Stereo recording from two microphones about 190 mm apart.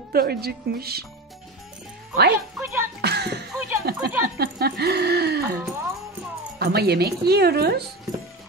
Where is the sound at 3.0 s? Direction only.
60° right (ahead or behind).